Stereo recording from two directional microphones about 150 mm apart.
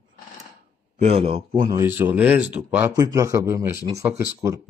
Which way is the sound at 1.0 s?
40° right (ahead or behind).